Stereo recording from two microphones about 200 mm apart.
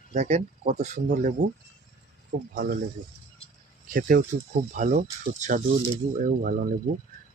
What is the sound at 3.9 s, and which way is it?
Speech, 45° right (ahead or behind).